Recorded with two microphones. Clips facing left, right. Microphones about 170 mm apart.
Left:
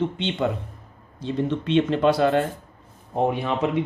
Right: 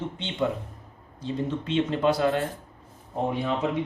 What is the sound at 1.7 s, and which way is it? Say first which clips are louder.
Speech: left 4 dB; 75° left (ahead or behind).